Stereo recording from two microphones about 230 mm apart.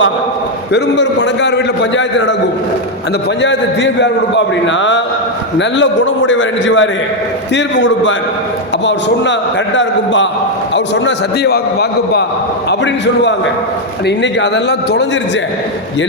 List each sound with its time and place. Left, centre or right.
0.7 s a man's voice: left
3.4 s a man's voice: left